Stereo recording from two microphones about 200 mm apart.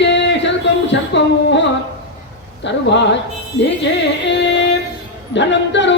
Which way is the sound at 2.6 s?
60° left (ahead or behind).